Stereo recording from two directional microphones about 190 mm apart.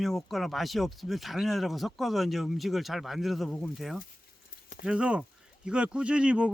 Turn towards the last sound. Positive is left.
turn(degrees=-5)  # may be behind; listen again after turning